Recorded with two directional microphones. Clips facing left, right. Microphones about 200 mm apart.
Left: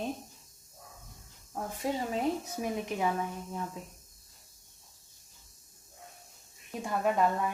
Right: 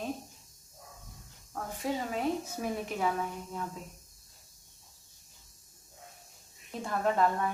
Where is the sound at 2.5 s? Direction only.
15° left (ahead or behind).